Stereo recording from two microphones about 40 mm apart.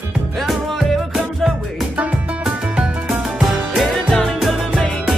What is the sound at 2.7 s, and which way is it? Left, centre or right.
Music, centre.